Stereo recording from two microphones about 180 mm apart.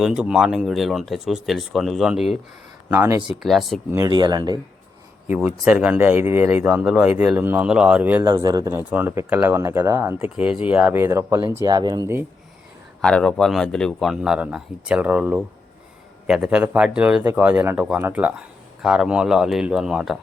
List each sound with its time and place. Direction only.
0.0 s speech: 5° right (ahead or behind)
2.9 s speech: 15° right (ahead or behind)
3.2 s speech: centre (ahead or behind)
3.9 s speech: 20° right (ahead or behind)
5.3 s speech: 10° right (ahead or behind)
8.2 s speech: 20° right (ahead or behind)
13.0 s speech: 5° left (ahead or behind)